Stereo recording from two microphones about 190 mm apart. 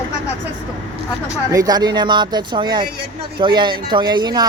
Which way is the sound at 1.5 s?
20° right (ahead or behind).